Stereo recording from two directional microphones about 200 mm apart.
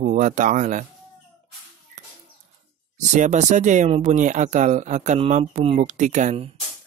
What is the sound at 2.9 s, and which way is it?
A man's voice, 35° right (ahead or behind).